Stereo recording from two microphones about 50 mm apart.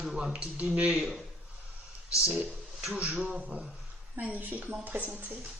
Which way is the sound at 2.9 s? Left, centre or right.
Right.